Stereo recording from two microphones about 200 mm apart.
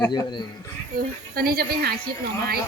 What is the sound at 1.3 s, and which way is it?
Speech, 50° right (ahead or behind).